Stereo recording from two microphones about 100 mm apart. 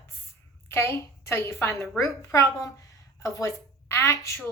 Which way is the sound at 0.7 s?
30° left (ahead or behind).